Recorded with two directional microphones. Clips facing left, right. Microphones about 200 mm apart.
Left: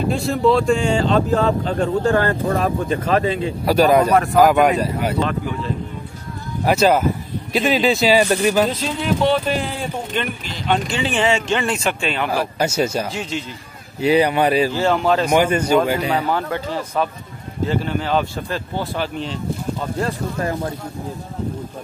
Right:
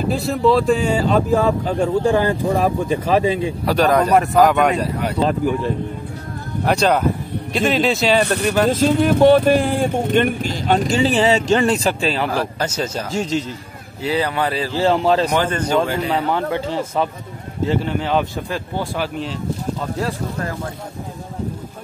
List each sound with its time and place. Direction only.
0.1 s speech: centre (ahead or behind)
3.6 s speech: 10° left (ahead or behind)
6.6 s speech: 5° left (ahead or behind)
8.3 s speech: 65° right (ahead or behind)
8.6 s speech: 45° right (ahead or behind)
12.3 s speech: 10° left (ahead or behind)
13.1 s speech: 40° right (ahead or behind)
14.0 s speech: 15° left (ahead or behind)
14.7 s speech: 30° right (ahead or behind)
15.2 s speech: 10° left (ahead or behind)
16.3 s speech: 25° right (ahead or behind); by 19.3 s 5° right (ahead or behind)